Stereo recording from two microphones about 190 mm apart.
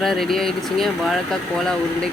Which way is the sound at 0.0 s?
Centre (ahead or behind).